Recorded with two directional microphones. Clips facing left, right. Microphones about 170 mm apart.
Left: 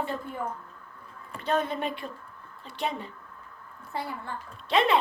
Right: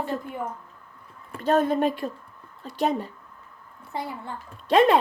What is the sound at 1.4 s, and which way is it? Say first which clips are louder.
A woman's voice: right 7 dB; 45° right (ahead or behind).